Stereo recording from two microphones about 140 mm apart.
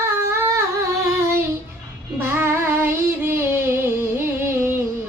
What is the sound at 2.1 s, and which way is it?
Child singing, 15° right (ahead or behind).